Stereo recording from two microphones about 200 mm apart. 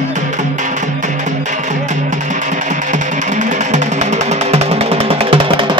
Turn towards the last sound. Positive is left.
turn(degrees=-25)  # may be behind; listen again after turning